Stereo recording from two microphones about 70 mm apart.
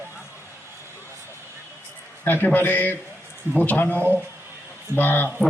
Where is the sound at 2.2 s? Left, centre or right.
Left.